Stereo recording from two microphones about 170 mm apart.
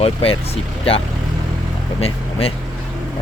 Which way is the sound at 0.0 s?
35° left (ahead or behind).